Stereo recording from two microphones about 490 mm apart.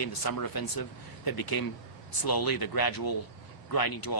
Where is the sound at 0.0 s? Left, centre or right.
Left.